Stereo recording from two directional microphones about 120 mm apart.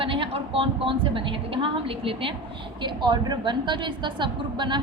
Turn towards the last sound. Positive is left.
turn(degrees=-40)  # may be behind; listen again after turning